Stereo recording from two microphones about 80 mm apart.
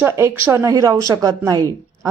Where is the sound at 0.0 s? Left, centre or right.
Right.